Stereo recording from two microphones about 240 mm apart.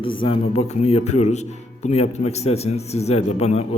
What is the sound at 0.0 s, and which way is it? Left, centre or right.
Speech, left.